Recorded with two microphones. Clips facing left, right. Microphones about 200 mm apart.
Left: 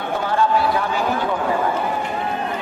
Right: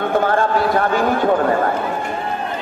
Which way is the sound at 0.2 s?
50° right (ahead or behind).